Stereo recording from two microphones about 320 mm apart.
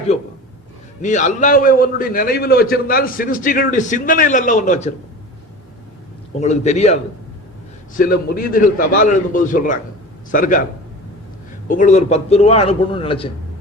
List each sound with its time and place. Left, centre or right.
1.0 s a man's voice: left
6.4 s a man's voice: left
11.7 s a man's voice: left